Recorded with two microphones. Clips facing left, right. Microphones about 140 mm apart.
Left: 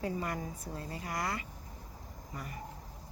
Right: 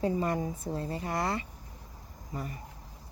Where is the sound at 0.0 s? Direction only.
25° right (ahead or behind).